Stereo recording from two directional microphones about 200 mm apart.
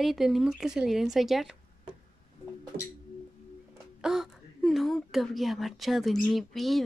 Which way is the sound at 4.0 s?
Centre (ahead or behind).